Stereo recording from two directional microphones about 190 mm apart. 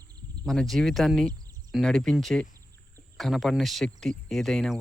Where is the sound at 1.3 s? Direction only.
20° right (ahead or behind).